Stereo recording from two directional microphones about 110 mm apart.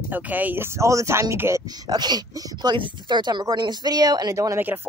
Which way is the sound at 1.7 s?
40° right (ahead or behind).